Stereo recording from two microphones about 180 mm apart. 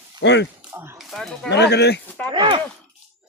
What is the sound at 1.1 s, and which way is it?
Speech, 5° left (ahead or behind).